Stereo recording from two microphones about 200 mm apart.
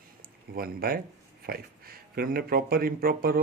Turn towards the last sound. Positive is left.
turn(degrees=-45)  # may be behind; listen again after turning